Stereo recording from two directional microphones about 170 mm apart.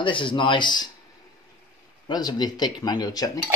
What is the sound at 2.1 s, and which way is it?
Speech, 25° left (ahead or behind).